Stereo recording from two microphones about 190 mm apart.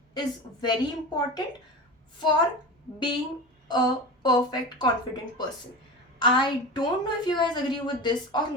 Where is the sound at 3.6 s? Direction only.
20° left (ahead or behind).